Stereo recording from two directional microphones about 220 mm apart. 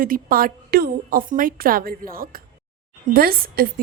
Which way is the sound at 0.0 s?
40° right (ahead or behind).